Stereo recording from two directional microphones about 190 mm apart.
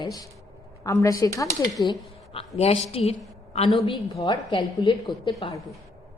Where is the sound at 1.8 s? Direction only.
25° left (ahead or behind).